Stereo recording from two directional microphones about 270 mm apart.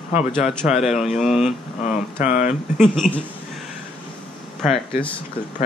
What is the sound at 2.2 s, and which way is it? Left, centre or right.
Speech, left.